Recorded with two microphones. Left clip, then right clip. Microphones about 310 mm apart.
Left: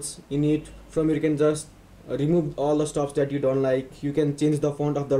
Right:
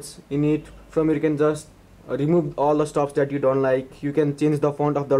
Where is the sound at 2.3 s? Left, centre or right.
Right.